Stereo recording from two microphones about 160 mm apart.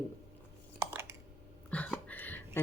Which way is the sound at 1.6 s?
10° left (ahead or behind).